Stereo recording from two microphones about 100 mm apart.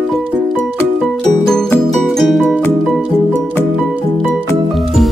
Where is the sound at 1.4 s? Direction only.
5° left (ahead or behind).